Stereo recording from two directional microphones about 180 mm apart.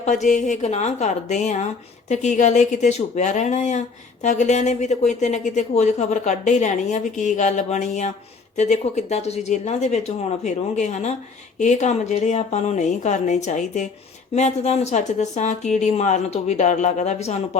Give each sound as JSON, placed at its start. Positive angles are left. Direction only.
{"t": 0.0, "sound": "speech", "side_deg": 40}